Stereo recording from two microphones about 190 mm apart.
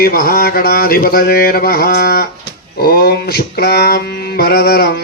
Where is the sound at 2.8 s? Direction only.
55° left (ahead or behind).